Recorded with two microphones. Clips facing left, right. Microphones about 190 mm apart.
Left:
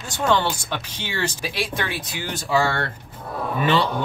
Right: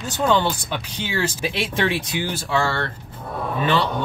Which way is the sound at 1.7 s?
25° right (ahead or behind).